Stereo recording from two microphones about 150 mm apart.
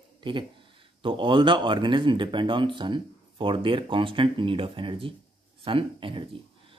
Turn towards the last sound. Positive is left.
turn(degrees=-35)  # may be behind; listen again after turning